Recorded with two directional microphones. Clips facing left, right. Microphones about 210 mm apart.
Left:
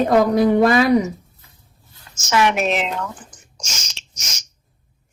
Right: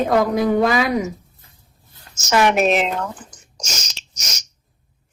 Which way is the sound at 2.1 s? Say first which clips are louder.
Right 2 dB; 45° right (ahead or behind).